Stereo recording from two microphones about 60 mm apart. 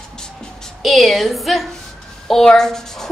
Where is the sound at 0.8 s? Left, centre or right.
Centre.